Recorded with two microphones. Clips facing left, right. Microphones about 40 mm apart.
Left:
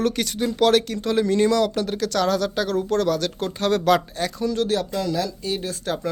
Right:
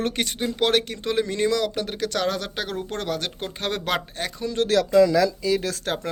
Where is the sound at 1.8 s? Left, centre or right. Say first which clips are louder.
Left 3 dB; right.